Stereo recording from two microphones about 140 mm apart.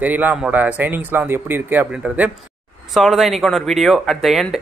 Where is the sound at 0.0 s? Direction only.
10° right (ahead or behind).